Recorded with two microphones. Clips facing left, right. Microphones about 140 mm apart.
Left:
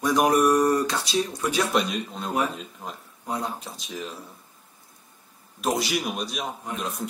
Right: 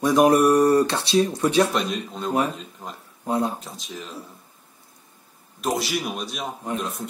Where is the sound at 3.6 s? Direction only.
Centre (ahead or behind).